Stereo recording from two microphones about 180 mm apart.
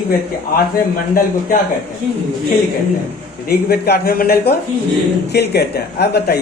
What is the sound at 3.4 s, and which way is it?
Speech, 60° left (ahead or behind).